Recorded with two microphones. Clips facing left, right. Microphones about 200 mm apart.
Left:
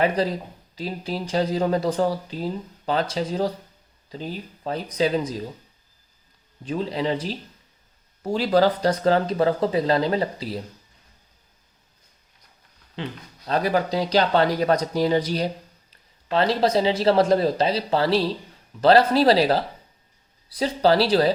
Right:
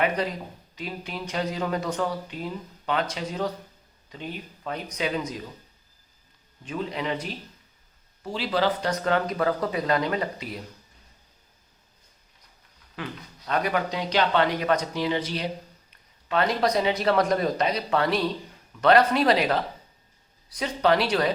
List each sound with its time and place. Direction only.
0.0 s speech: 35° left (ahead or behind)
6.7 s speech: 35° left (ahead or behind)
13.0 s a man's voice: 30° left (ahead or behind)